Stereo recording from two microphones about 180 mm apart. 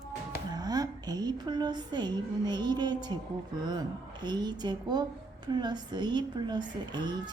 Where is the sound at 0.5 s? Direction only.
20° right (ahead or behind).